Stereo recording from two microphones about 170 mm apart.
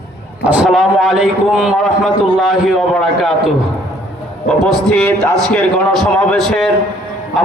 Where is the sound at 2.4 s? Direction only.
Centre (ahead or behind).